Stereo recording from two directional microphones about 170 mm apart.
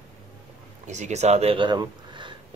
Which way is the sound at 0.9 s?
45° right (ahead or behind).